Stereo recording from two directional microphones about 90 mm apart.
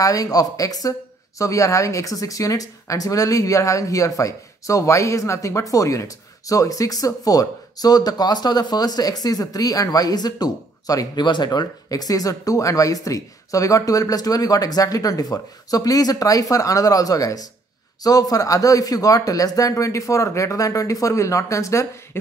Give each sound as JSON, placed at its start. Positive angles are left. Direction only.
{"t": 0.0, "sound": "speech", "side_deg": 40}